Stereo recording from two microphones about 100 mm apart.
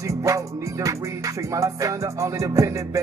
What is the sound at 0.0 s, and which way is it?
Music, 30° right (ahead or behind).